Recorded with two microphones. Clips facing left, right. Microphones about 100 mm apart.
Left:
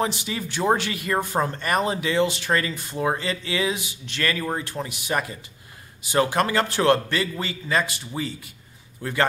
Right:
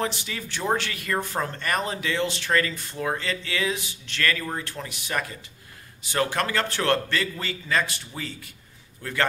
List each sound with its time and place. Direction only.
0.0 s speech: 15° left (ahead or behind)